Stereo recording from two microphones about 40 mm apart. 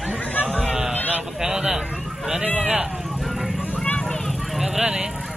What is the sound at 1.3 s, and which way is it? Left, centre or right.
Speech, right.